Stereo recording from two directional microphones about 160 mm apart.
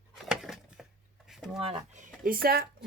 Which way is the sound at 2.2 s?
65° right (ahead or behind).